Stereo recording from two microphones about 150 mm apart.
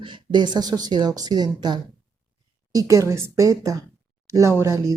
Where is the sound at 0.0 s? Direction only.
30° right (ahead or behind).